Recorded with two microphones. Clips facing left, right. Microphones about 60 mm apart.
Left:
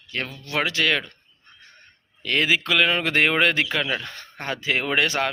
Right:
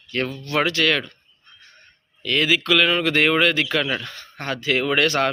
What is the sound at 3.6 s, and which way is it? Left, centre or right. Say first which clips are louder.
Speech: right 2 dB; centre.